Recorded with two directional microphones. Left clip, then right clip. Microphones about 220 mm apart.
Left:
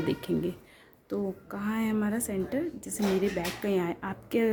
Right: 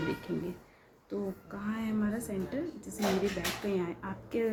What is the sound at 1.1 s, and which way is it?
Speech, 50° left (ahead or behind).